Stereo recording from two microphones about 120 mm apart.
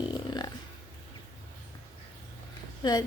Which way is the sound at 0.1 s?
35° left (ahead or behind).